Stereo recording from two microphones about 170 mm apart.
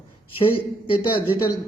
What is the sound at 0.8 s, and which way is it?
Speech, 30° left (ahead or behind).